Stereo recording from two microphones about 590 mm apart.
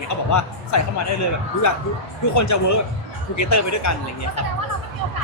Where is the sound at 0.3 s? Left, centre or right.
Left.